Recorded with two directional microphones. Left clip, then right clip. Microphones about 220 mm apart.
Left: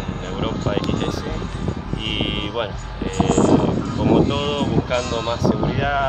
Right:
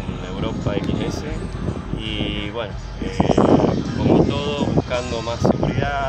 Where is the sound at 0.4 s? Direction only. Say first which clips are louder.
Left 2 dB; 10° left (ahead or behind).